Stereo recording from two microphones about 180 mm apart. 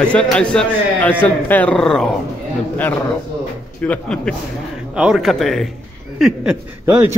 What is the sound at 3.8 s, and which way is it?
A man's voice, 5° left (ahead or behind).